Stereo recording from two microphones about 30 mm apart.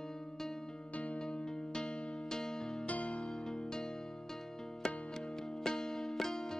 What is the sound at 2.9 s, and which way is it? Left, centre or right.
Music, left.